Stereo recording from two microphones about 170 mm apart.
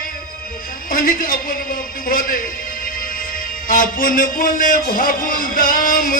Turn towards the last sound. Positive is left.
turn(degrees=55)  # may be behind; listen again after turning